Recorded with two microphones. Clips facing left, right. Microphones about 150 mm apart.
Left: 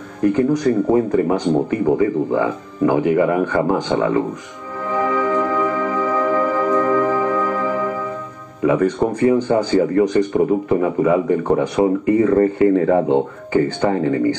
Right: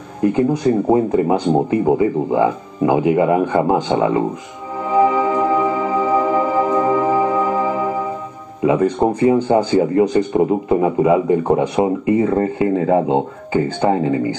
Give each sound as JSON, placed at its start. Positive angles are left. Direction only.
{"t": 0.2, "sound": "speech", "side_deg": -25}
{"t": 4.8, "sound": "music", "side_deg": -20}
{"t": 8.6, "sound": "speech", "side_deg": -25}